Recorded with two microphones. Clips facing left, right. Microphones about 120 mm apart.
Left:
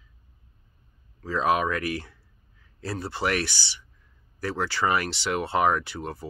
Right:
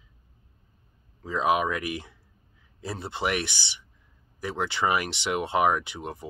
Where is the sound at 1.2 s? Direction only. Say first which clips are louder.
Left 1 dB; 15° right (ahead or behind).